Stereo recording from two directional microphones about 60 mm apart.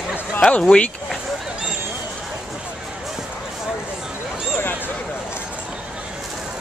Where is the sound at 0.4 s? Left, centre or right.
Centre.